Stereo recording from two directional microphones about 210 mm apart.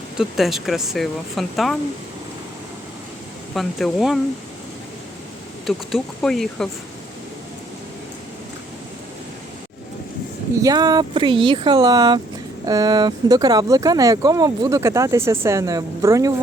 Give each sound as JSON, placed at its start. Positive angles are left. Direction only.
{"t": 0.2, "sound": "speech", "side_deg": 0}
{"t": 3.5, "sound": "speech", "side_deg": 0}
{"t": 5.6, "sound": "speech", "side_deg": 0}
{"t": 10.5, "sound": "speech", "side_deg": -15}